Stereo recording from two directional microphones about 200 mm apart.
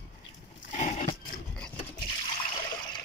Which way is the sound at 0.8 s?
35° left (ahead or behind).